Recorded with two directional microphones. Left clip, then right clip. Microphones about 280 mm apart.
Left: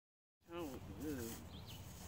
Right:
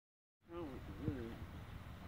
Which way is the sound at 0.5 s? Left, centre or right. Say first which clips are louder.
Left 1 dB; left.